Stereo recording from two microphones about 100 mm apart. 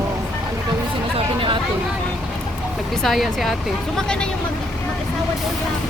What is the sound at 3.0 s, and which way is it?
Speech, centre (ahead or behind).